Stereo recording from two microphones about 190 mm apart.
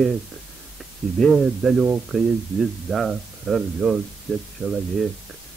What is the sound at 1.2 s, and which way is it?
Speech, centre (ahead or behind).